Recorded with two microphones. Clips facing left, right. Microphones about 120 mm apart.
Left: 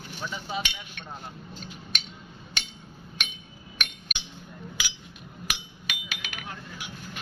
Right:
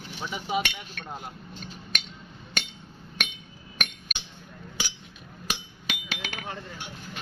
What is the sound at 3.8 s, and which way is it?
Chink, 45° right (ahead or behind).